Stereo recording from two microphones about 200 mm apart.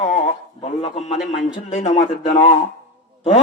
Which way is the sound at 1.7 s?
35° left (ahead or behind).